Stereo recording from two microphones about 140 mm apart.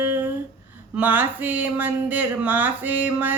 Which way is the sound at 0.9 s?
10° right (ahead or behind).